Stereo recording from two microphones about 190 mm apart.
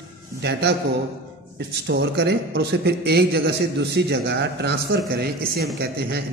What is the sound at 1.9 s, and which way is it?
A man's voice, 60° right (ahead or behind).